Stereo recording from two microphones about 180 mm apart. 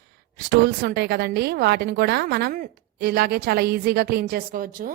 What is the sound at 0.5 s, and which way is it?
A woman's voice, 60° right (ahead or behind).